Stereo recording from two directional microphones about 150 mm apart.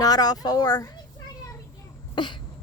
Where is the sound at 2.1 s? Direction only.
30° left (ahead or behind).